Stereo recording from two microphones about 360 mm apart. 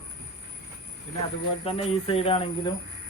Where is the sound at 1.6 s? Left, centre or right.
Centre.